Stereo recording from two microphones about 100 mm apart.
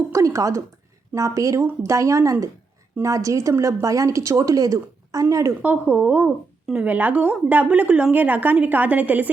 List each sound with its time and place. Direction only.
0.1 s a sound: 35° right (ahead or behind)
1.1 s a woman's voice: 35° right (ahead or behind)
5.6 s a woman's voice: 15° right (ahead or behind)